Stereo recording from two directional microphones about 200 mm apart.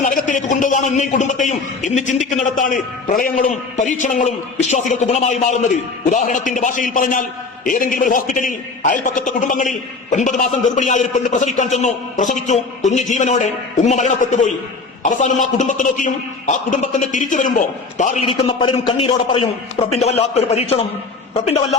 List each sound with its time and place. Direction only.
0.0 s a man's voice: 40° left (ahead or behind)
15.5 s a man's voice: 40° left (ahead or behind)
18.3 s a man's voice: 25° left (ahead or behind)